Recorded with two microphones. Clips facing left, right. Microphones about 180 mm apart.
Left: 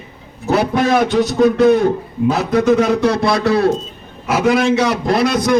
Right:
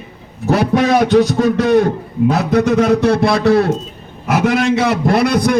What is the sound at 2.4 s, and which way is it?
A man's voice, 60° right (ahead or behind).